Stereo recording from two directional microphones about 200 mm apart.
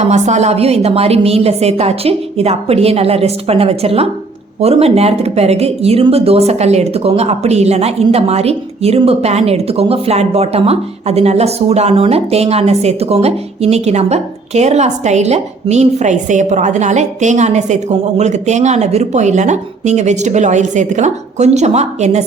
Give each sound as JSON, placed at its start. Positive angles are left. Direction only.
{"t": 0.0, "sound": "speech", "side_deg": -35}